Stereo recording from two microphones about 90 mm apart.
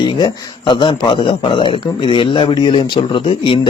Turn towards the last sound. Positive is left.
turn(degrees=75)  # may be behind; listen again after turning